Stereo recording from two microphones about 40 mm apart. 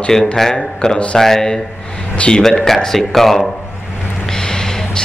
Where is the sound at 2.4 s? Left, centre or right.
Centre.